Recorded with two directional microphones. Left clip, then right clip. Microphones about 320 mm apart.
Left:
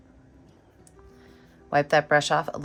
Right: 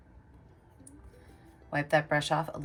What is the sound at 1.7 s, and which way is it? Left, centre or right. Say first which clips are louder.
Speech: left 7 dB; centre.